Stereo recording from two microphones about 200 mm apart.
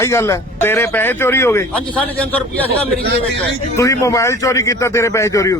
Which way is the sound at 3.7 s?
15° left (ahead or behind).